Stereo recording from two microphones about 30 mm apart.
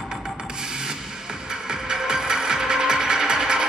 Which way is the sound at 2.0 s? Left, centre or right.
Right.